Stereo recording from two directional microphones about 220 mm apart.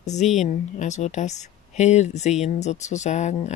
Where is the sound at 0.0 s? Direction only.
30° left (ahead or behind).